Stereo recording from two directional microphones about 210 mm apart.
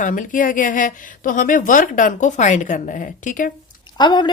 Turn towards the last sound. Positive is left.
turn(degrees=20)  # may be behind; listen again after turning